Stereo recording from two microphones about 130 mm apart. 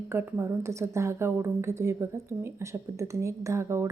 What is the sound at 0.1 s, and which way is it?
Speech, 20° right (ahead or behind).